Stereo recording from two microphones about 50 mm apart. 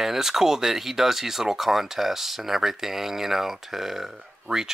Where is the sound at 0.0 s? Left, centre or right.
Centre.